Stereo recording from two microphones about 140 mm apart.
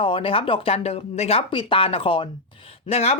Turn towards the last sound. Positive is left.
turn(degrees=50)  # may be behind; listen again after turning